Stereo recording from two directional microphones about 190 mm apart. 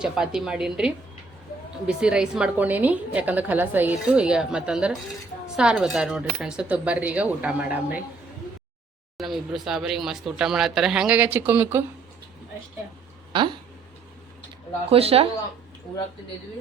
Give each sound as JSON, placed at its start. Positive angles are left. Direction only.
{"t": 0.0, "sound": "a woman's voice", "side_deg": -5}
{"t": 9.1, "sound": "a woman's voice", "side_deg": 0}
{"t": 13.3, "sound": "speech", "side_deg": -25}
{"t": 14.8, "sound": "speech", "side_deg": -30}